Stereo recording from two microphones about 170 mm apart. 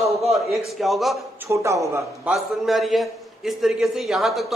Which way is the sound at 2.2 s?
Centre (ahead or behind).